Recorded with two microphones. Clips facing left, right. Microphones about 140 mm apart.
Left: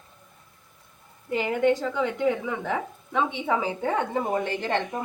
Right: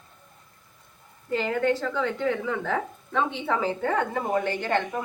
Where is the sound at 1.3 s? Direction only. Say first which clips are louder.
Left 2 dB; 15° left (ahead or behind).